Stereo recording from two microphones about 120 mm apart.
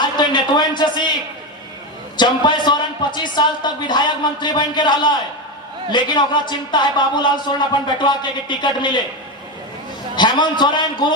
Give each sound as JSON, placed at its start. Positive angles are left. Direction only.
{"t": 0.0, "sound": "a man's voice", "side_deg": 40}
{"t": 2.1, "sound": "speech", "side_deg": 40}
{"t": 10.2, "sound": "speech", "side_deg": 40}